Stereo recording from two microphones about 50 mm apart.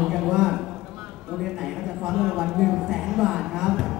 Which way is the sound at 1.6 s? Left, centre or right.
Centre.